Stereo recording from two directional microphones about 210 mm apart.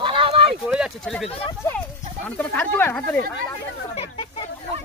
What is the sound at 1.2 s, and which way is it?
Speech, 25° left (ahead or behind).